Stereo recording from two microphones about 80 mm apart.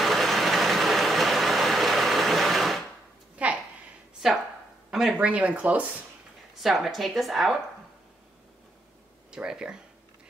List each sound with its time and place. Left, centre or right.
0.0 s vehicle: centre
3.4 s a sound: centre
4.9 s speech: centre
6.6 s a woman's voice: centre
9.3 s speech: centre